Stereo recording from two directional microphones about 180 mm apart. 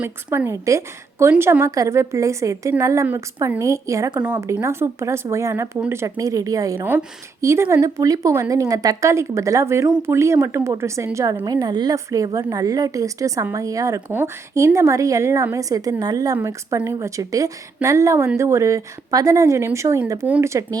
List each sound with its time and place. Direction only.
0.0 s a woman's voice: 10° right (ahead or behind)